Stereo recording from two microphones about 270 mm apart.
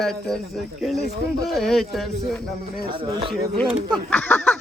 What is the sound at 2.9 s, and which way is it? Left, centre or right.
Speech, centre.